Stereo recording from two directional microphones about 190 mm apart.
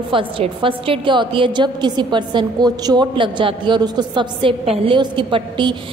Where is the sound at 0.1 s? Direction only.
25° right (ahead or behind).